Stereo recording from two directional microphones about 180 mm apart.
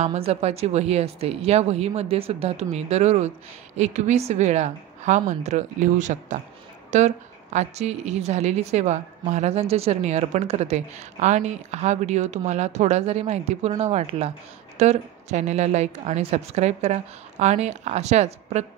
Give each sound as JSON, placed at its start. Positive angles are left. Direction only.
{"t": 0.0, "sound": "a woman's voice", "side_deg": -35}